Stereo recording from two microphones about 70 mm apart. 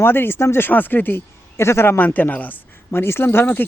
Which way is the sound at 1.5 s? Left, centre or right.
Left.